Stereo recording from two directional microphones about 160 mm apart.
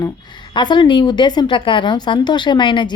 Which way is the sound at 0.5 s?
30° left (ahead or behind).